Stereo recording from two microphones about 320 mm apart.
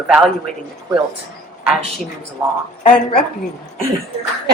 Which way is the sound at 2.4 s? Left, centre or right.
Centre.